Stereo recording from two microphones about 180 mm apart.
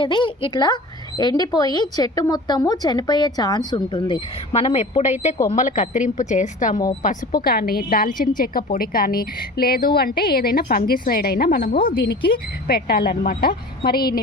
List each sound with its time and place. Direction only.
0.0 s a woman's voice: 25° left (ahead or behind); by 14.2 s 60° left (ahead or behind)